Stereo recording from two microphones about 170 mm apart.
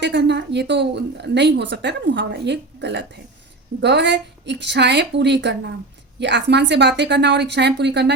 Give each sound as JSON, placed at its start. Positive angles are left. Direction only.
{"t": 0.0, "sound": "a woman's voice", "side_deg": -90}